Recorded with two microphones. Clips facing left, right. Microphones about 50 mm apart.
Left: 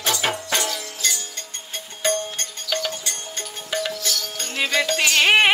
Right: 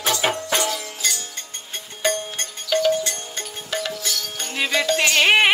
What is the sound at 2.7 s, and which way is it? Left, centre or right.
Music, centre.